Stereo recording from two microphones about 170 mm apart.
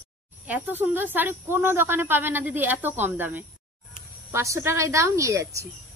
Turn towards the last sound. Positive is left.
turn(degrees=-20)  # may be behind; listen again after turning